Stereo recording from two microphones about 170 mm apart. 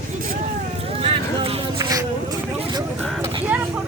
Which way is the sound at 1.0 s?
35° right (ahead or behind).